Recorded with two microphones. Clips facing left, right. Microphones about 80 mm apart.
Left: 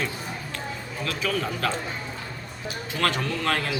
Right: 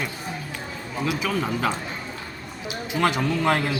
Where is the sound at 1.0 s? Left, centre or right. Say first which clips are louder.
Right 2 dB; centre.